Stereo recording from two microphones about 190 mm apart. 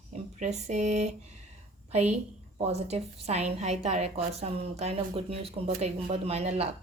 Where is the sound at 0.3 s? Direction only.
40° right (ahead or behind).